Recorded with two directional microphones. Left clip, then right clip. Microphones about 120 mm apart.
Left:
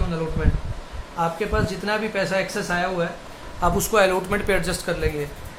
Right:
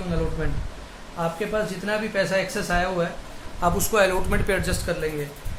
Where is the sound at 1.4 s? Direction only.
30° left (ahead or behind).